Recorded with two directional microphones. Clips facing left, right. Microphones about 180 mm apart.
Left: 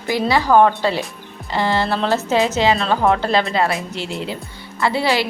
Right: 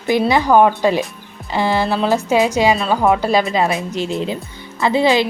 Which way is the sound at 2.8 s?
Centre (ahead or behind).